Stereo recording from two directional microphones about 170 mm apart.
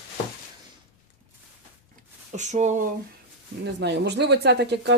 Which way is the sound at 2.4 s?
45° right (ahead or behind).